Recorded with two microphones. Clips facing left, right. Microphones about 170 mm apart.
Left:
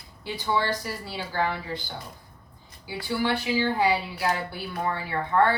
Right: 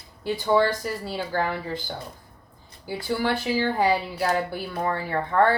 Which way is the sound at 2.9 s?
45° right (ahead or behind).